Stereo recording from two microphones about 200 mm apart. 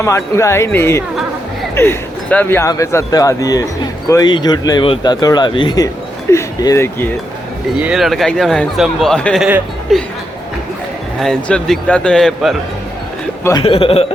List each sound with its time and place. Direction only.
0.0 s speech: 15° left (ahead or behind)
7.8 s a man's voice: 5° right (ahead or behind)
11.2 s a man's voice: 5° left (ahead or behind)
13.4 s speech: 20° left (ahead or behind)